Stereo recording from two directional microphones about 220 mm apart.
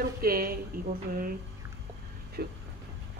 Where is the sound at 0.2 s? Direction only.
40° right (ahead or behind).